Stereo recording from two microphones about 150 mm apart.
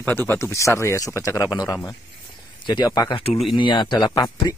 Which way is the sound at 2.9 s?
30° left (ahead or behind).